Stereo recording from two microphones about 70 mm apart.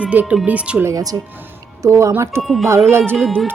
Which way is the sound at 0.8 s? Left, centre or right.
Right.